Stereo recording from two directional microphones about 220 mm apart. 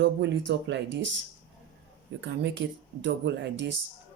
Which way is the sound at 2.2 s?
55° right (ahead or behind).